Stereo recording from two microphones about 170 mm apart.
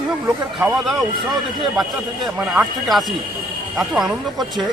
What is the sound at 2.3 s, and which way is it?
Speech, 5° right (ahead or behind).